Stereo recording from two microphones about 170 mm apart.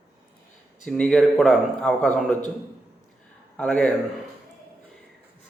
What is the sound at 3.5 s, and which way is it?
Speech, 5° left (ahead or behind).